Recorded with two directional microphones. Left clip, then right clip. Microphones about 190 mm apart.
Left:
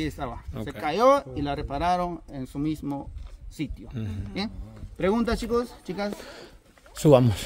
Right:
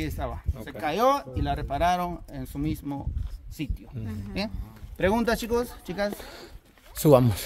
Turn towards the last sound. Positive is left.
turn(degrees=5)  # may be behind; listen again after turning